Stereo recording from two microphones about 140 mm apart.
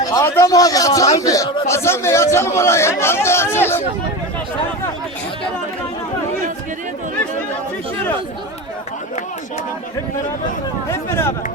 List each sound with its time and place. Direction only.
0.0 s a man's voice: 25° left (ahead or behind)
11.1 s speech: 15° left (ahead or behind)